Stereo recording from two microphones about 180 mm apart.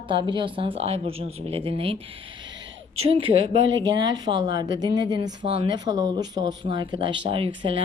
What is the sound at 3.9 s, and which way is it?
Speech, 25° right (ahead or behind).